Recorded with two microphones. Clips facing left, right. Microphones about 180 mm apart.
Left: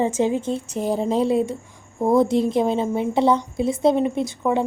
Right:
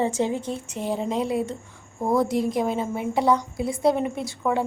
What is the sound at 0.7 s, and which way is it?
A woman's voice, 40° left (ahead or behind).